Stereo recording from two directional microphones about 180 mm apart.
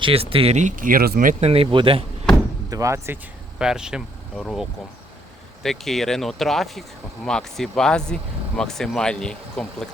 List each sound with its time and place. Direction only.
0.0 s speech: 30° right (ahead or behind)
2.6 s speech: 20° right (ahead or behind)
3.6 s speech: 5° right (ahead or behind)